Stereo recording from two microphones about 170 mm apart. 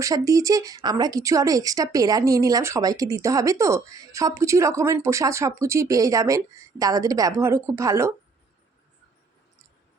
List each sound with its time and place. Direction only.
0.0 s speech: 20° right (ahead or behind)